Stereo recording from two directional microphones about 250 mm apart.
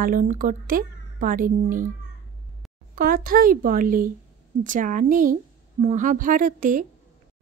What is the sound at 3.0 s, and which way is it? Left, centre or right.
A woman's voice, right.